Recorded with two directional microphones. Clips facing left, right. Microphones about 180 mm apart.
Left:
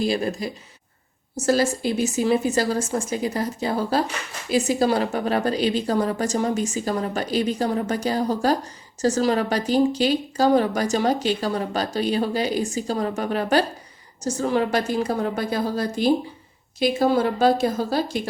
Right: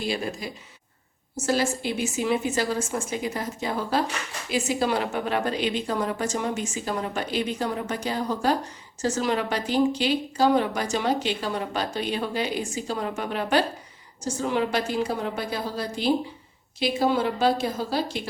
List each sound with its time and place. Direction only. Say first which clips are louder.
0.0 s a woman's voice: left 6 dB; 40° left (ahead or behind)